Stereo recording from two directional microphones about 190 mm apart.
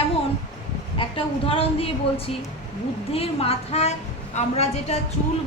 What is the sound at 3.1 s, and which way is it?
A woman's voice, 30° left (ahead or behind).